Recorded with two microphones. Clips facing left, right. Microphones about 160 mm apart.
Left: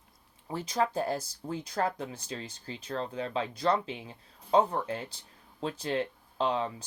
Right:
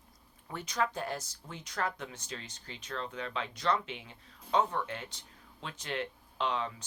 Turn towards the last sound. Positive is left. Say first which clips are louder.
# left 4 dB
turn(degrees=35)  # may be behind; listen again after turning